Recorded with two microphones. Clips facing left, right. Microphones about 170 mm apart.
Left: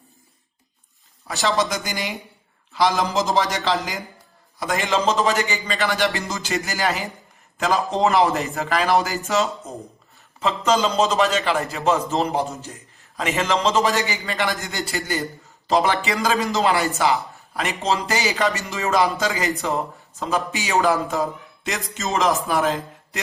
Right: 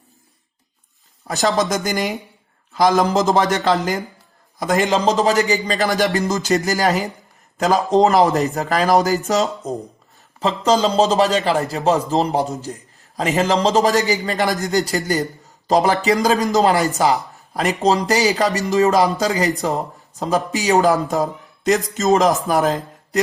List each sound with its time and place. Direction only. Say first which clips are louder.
1.3 s a man's voice: right 4 dB; 40° right (ahead or behind)